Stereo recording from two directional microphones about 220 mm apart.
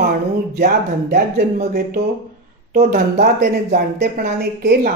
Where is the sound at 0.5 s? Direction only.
45° right (ahead or behind).